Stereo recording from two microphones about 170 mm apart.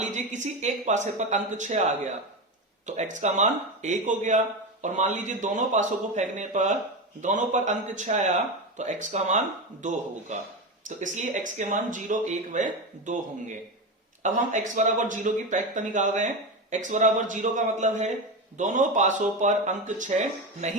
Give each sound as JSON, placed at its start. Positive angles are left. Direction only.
{"t": 0.0, "sound": "speech", "side_deg": -45}
{"t": 14.2, "sound": "speech", "side_deg": -45}